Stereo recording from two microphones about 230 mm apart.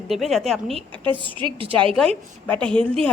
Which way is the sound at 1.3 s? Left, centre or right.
Right.